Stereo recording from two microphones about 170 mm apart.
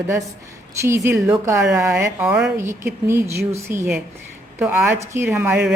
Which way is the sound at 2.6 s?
15° right (ahead or behind).